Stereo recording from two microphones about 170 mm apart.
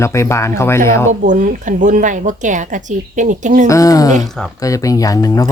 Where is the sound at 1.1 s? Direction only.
50° right (ahead or behind).